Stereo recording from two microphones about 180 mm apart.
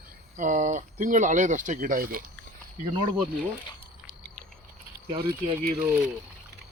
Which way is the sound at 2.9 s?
25° right (ahead or behind).